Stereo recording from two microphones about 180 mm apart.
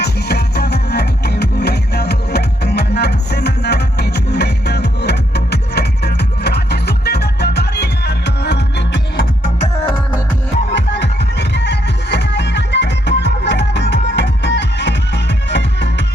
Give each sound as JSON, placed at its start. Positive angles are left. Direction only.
{"t": 0.0, "sound": "music", "side_deg": 65}
{"t": 10.7, "sound": "music", "side_deg": 75}